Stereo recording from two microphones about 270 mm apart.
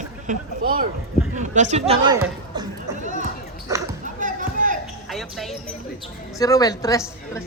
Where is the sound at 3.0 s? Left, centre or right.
Right.